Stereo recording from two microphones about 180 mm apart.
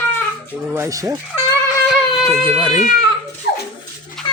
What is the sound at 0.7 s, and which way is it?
Speech, 15° right (ahead or behind).